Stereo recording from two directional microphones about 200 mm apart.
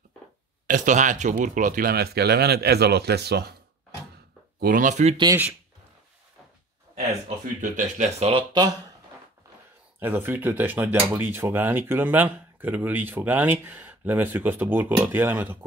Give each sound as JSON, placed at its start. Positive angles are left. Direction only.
{"t": 0.7, "sound": "speech", "side_deg": -40}
{"t": 4.6, "sound": "speech", "side_deg": -45}
{"t": 5.1, "sound": "speech", "side_deg": -20}
{"t": 7.6, "sound": "speech", "side_deg": -35}
{"t": 9.9, "sound": "speech", "side_deg": -10}